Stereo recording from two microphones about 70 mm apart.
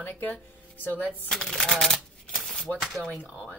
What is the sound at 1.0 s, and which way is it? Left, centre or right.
Speech, centre.